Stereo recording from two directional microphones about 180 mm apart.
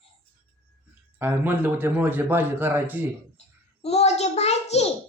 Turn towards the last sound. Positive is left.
turn(degrees=35)  # may be behind; listen again after turning